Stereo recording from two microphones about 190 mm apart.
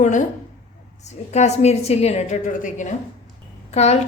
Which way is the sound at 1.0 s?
35° left (ahead or behind).